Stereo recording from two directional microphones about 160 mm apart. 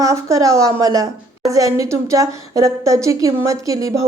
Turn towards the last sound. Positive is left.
turn(degrees=-20)  # may be behind; listen again after turning